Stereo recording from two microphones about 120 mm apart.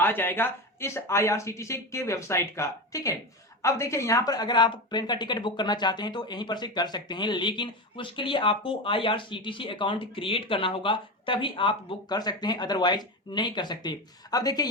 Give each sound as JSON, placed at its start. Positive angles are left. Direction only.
{"t": 0.0, "sound": "speech", "side_deg": 15}